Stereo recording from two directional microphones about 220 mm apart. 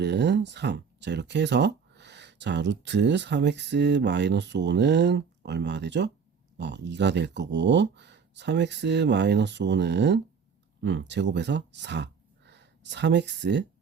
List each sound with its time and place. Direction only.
0.0 s speech: 50° right (ahead or behind)